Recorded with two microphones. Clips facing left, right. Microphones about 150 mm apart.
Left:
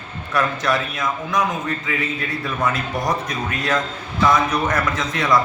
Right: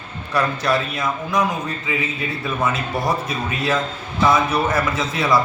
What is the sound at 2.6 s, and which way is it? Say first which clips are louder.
Speech: even; 5° right (ahead or behind).